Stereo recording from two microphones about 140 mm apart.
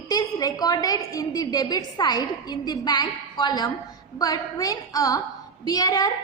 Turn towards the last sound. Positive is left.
turn(degrees=30)  # may be behind; listen again after turning